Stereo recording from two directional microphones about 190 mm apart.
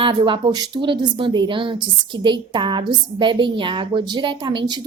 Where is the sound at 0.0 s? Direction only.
25° right (ahead or behind).